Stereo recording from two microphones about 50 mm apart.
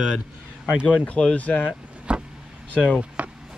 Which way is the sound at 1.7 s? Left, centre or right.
Centre.